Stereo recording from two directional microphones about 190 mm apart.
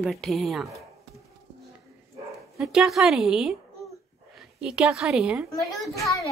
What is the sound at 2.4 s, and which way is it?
Speech, centre (ahead or behind).